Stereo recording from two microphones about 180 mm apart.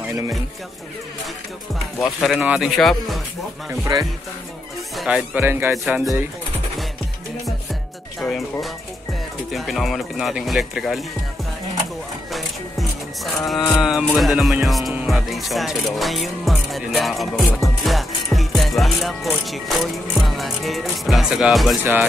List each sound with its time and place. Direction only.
2.1 s speech: centre (ahead or behind)
3.8 s speech: 20° right (ahead or behind)
4.9 s speech: 5° right (ahead or behind)
8.2 s speech: centre (ahead or behind)
12.3 s music: centre (ahead or behind)
13.7 s speech: centre (ahead or behind)